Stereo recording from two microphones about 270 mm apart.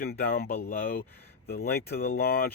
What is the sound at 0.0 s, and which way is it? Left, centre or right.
Speech, left.